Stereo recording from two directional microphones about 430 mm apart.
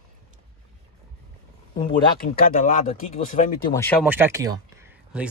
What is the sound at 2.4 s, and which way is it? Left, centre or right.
Speech, centre.